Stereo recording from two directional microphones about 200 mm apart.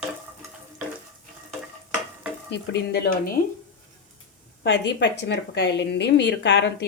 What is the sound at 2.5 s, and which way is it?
Stir, 55° left (ahead or behind).